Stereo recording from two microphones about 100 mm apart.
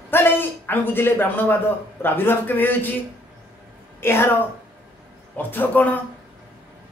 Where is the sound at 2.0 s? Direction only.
20° left (ahead or behind).